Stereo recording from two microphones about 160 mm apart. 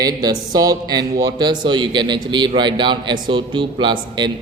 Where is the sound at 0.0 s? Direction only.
25° right (ahead or behind).